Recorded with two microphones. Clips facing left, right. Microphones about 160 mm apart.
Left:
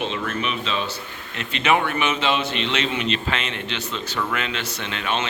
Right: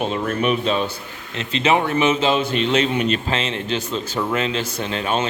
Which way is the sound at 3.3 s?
30° right (ahead or behind).